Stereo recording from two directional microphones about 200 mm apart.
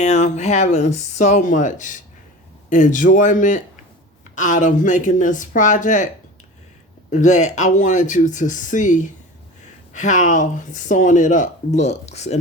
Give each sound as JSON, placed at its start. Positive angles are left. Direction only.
{"t": 0.0, "sound": "speech", "side_deg": 35}
{"t": 7.1, "sound": "speech", "side_deg": 40}